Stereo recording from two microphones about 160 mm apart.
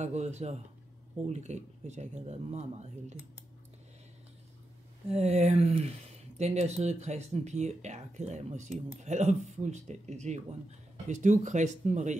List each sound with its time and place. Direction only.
0.0 s speech: 45° right (ahead or behind)
5.1 s speech: 45° right (ahead or behind)